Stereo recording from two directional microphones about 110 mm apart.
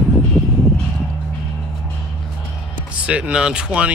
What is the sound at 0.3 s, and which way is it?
Vehicle, 5° left (ahead or behind).